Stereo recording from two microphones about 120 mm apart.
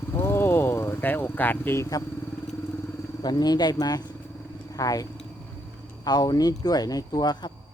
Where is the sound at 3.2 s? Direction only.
35° left (ahead or behind).